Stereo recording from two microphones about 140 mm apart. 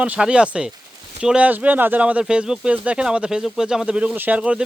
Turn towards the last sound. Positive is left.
turn(degrees=-5)  # may be behind; listen again after turning